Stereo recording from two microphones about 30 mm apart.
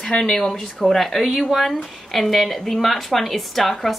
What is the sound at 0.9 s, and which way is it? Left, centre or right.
Speech, centre.